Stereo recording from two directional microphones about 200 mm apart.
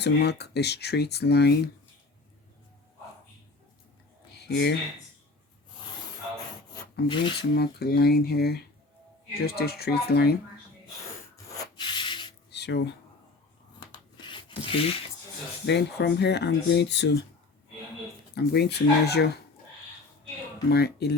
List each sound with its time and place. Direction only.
0.0 s speech: 55° left (ahead or behind)
4.3 s a sound: 55° left (ahead or behind)
7.1 s speech: 25° left (ahead or behind)
7.5 s speech: 55° left (ahead or behind)
11.8 s rub: 25° left (ahead or behind)
12.5 s a sound: 60° left (ahead or behind)
13.9 s filing: 25° left (ahead or behind)
15.6 s speech: 60° left (ahead or behind)
18.3 s speech: 55° left (ahead or behind)
20.7 s speech: 55° left (ahead or behind)